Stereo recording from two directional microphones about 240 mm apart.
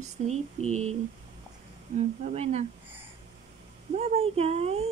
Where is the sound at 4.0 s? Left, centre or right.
Right.